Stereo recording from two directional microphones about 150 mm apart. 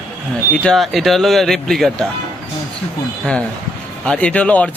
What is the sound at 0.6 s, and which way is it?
Speech, centre (ahead or behind).